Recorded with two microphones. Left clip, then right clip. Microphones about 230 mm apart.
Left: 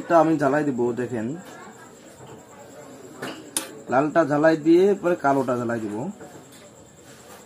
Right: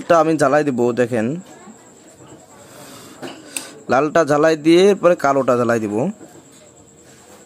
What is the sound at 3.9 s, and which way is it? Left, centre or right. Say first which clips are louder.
Speech: right 5 dB; right.